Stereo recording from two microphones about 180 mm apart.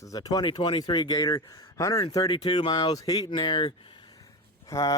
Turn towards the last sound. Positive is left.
turn(degrees=20)  # may be behind; listen again after turning